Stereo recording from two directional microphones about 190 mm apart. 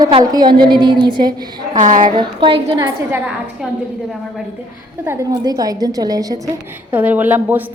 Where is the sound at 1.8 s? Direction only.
40° right (ahead or behind).